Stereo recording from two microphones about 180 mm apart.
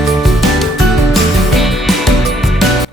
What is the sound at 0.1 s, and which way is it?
Music, centre (ahead or behind).